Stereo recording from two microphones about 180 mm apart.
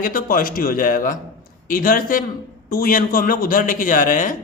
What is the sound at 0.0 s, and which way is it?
A man's voice, 50° left (ahead or behind).